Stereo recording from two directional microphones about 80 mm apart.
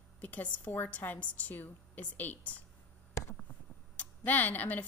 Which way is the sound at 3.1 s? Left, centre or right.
Left.